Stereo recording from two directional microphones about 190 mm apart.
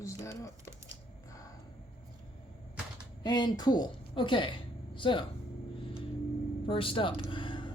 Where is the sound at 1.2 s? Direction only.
15° left (ahead or behind).